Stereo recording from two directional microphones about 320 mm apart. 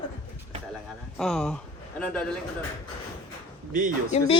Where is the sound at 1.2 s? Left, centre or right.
Centre.